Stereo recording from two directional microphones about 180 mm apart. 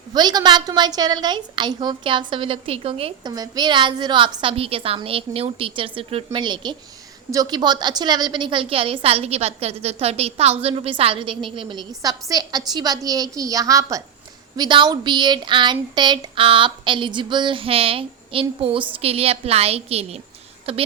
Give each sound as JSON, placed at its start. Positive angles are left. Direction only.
{"t": 0.1, "sound": "a woman's voice", "side_deg": -25}